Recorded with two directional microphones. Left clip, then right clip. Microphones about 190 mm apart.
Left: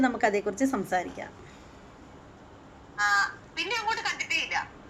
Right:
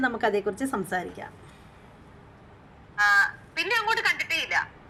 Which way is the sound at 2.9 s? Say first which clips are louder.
Right 4 dB; 10° right (ahead or behind).